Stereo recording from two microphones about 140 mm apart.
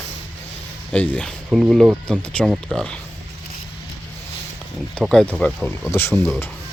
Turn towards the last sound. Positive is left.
turn(degrees=20)  # may be behind; listen again after turning